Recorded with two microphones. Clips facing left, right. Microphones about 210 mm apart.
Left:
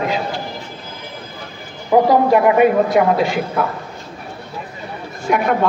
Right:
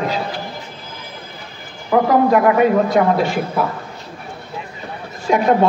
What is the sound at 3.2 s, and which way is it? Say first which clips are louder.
Speech: even; centre (ahead or behind).